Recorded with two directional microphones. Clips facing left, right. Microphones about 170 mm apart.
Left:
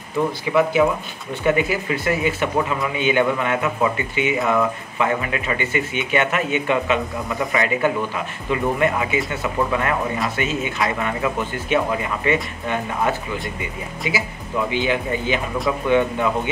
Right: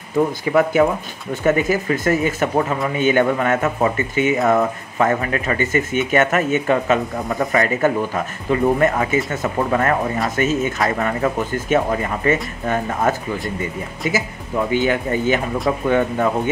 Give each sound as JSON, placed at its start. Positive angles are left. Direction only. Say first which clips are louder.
{"t": 0.5, "sound": "speech", "louder": "right 1 dB", "side_deg": -50}